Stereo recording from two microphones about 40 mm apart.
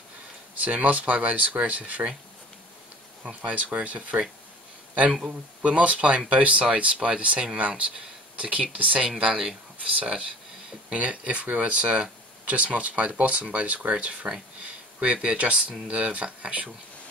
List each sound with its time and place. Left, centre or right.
0.6 s speech: right
3.3 s speech: right
5.6 s speech: right
9.2 s speech: right
10.9 s speech: right